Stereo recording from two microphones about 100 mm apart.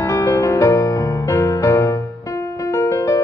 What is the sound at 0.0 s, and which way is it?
Music, 30° left (ahead or behind).